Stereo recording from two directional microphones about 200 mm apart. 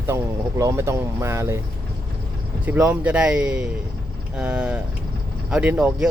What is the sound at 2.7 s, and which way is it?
Speech, 5° right (ahead or behind).